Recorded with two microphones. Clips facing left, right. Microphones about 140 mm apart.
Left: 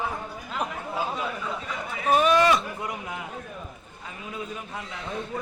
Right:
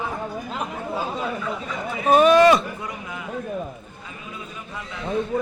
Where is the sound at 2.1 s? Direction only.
60° right (ahead or behind).